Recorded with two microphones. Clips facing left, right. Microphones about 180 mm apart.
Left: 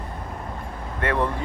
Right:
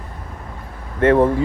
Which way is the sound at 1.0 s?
45° right (ahead or behind).